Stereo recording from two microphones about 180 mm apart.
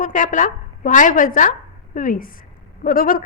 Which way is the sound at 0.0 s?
45° left (ahead or behind).